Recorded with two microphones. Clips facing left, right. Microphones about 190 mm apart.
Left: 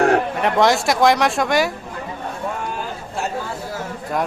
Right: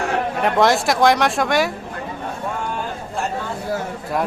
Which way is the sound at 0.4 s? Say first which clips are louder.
Right 2 dB; centre (ahead or behind).